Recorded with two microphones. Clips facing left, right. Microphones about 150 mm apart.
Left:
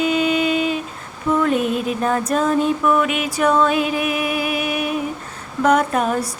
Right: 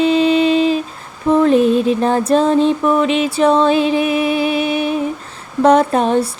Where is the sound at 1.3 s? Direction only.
30° right (ahead or behind).